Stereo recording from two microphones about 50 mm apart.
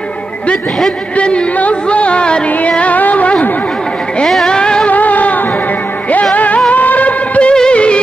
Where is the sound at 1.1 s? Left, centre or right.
Left.